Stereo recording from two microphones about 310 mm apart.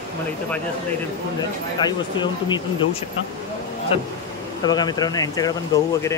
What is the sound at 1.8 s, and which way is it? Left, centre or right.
Speech, centre.